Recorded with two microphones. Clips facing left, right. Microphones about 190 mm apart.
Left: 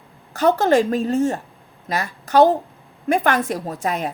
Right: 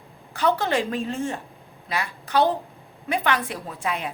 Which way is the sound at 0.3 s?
45° left (ahead or behind).